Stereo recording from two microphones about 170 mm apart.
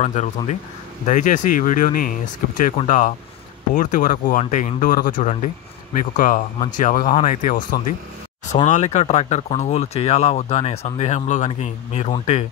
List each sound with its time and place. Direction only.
0.0 s speech: 45° left (ahead or behind)